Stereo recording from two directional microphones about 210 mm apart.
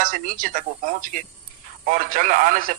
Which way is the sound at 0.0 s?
40° right (ahead or behind).